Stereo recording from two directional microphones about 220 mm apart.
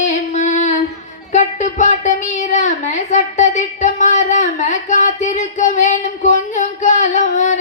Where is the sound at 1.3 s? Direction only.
35° left (ahead or behind).